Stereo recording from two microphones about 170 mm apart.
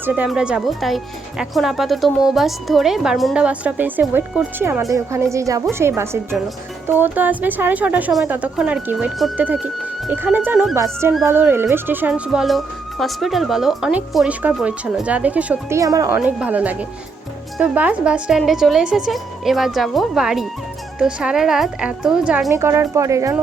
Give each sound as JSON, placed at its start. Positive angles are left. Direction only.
{"t": 0.0, "sound": "speech", "side_deg": -10}
{"t": 6.8, "sound": "speech", "side_deg": -10}
{"t": 15.8, "sound": "speech", "side_deg": -20}
{"t": 22.5, "sound": "speech", "side_deg": -15}